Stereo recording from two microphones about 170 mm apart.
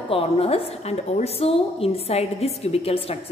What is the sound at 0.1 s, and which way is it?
A woman's voice, 35° left (ahead or behind).